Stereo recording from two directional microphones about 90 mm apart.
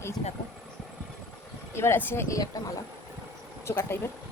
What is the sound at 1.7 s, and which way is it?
Speech, 30° left (ahead or behind).